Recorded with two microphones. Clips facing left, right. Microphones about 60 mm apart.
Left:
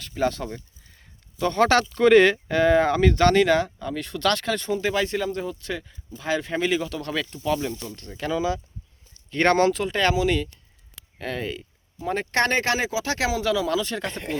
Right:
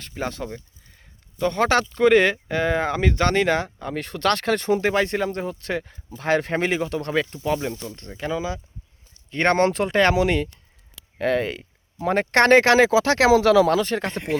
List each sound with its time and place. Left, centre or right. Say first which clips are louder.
0.1 s speech: left 4 dB; centre; by 8.1 s right
8.1 s speech: left 2 dB; centre
9.6 s speech: right 3 dB; right